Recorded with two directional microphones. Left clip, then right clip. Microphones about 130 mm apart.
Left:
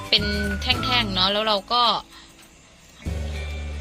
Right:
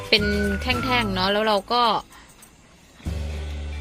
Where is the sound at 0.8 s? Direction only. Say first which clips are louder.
Left 1 dB; 65° right (ahead or behind).